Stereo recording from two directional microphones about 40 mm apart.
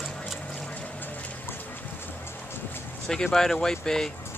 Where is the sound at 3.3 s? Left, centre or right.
Centre.